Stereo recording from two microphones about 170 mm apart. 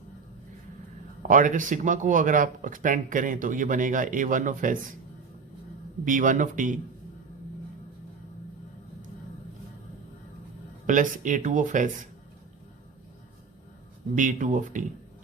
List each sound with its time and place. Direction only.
1.3 s speech: 50° right (ahead or behind)
6.1 s speech: 50° right (ahead or behind)
10.8 s speech: 50° right (ahead or behind)
14.2 s speech: 50° right (ahead or behind)